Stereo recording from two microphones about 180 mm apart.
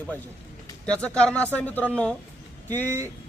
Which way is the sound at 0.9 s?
5° left (ahead or behind).